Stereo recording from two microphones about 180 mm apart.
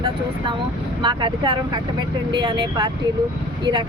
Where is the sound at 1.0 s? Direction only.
25° right (ahead or behind).